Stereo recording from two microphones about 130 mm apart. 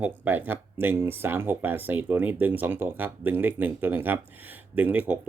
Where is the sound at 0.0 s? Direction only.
15° right (ahead or behind).